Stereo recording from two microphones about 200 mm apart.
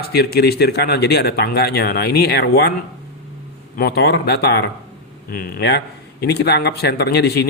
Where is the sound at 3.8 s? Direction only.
55° left (ahead or behind).